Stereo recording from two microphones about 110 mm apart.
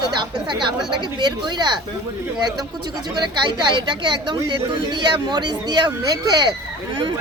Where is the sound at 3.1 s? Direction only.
45° right (ahead or behind).